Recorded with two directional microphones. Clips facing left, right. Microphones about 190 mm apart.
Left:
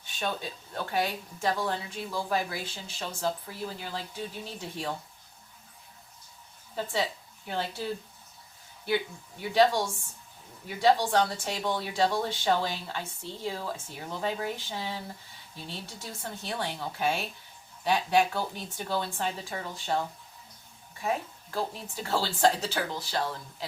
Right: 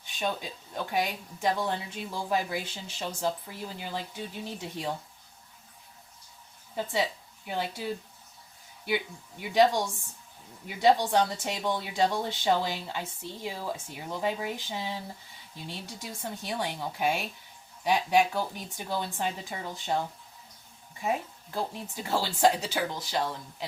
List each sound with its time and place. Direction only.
0.0 s speech: 15° right (ahead or behind)
6.7 s speech: 15° right (ahead or behind)
8.9 s speech: 15° right (ahead or behind)
21.0 s speech: 15° right (ahead or behind)